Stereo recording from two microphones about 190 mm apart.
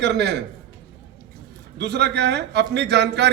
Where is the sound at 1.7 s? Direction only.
65° right (ahead or behind).